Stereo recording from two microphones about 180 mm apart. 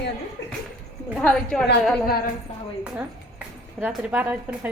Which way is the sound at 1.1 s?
5° left (ahead or behind).